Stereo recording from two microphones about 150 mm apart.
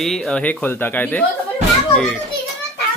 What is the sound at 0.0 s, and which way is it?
A child's voice, 5° left (ahead or behind).